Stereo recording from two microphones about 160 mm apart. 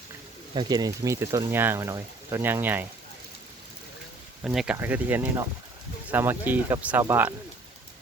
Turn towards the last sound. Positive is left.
turn(degrees=-15)  # may be behind; listen again after turning